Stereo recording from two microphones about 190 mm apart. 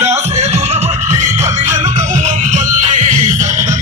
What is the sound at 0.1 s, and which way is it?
Music, 35° right (ahead or behind).